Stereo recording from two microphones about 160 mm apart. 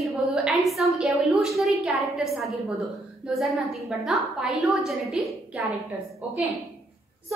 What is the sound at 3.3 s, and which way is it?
A woman's voice, centre (ahead or behind).